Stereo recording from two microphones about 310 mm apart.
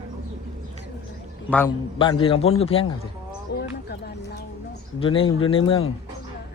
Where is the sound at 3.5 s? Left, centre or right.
Left.